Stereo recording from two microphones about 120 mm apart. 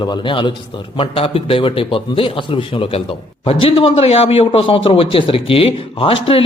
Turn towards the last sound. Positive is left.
turn(degrees=50)  # may be behind; listen again after turning